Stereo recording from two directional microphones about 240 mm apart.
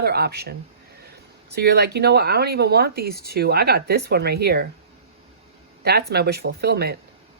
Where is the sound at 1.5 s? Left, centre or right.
Right.